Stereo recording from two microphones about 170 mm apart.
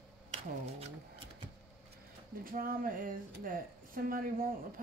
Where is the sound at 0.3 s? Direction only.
35° right (ahead or behind).